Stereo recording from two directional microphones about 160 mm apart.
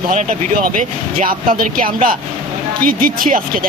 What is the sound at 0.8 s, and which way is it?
Speech, 60° right (ahead or behind).